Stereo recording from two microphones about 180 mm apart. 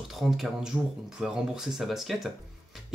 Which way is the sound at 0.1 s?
Centre (ahead or behind).